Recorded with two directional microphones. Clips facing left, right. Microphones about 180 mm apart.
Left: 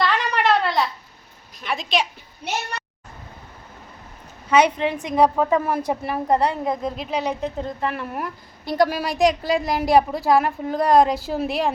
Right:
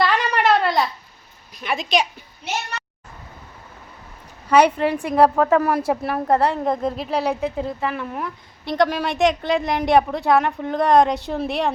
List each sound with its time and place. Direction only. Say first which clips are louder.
0.0 s a sound: right 2 dB; centre (ahead or behind)
1.5 s a woman's voice: right 2 dB; centre (ahead or behind)
4.5 s a woman's voice: right 2 dB; 5° right (ahead or behind)
5.4 s speech: right 3 dB; 70° right (ahead or behind)
5.8 s a woman's voice: right 2 dB; 5° right (ahead or behind)